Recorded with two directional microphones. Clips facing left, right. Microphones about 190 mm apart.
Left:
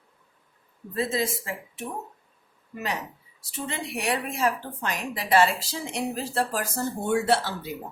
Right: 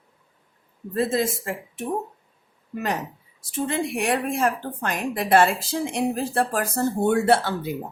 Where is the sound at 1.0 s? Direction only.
50° right (ahead or behind).